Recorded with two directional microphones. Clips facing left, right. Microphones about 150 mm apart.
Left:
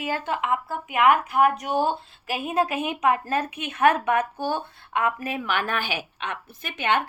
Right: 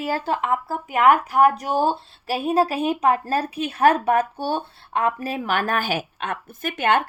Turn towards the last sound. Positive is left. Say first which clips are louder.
# right 4 dB
turn(degrees=-45)  # may be behind; listen again after turning